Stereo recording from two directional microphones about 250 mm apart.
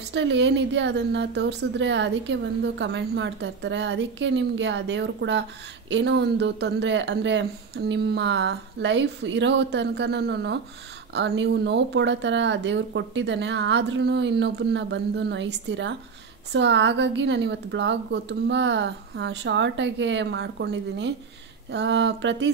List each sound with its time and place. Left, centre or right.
0.1 s a woman's voice: right